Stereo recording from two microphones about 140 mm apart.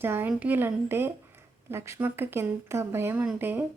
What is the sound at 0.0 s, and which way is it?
A woman's voice, 15° right (ahead or behind).